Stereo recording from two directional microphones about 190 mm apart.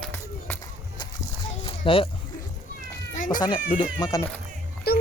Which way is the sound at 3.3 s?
25° left (ahead or behind).